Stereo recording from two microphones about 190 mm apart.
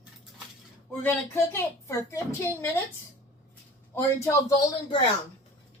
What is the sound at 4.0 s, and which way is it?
A woman's voice, 15° left (ahead or behind).